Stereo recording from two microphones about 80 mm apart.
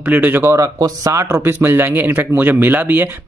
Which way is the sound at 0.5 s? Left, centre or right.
Right.